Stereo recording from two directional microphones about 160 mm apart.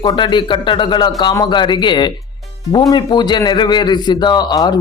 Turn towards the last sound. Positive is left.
turn(degrees=25)  # may be behind; listen again after turning